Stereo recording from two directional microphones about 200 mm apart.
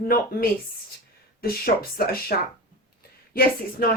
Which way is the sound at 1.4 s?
50° left (ahead or behind).